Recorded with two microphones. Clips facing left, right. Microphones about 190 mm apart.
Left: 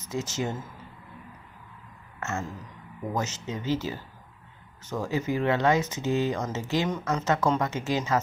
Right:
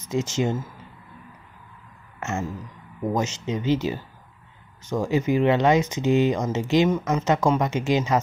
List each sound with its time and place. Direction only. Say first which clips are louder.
0.1 s speech: right 6 dB; 20° right (ahead or behind)
2.1 s a sound: right 4 dB; 20° right (ahead or behind)
3.2 s speech: right 3 dB; 20° right (ahead or behind)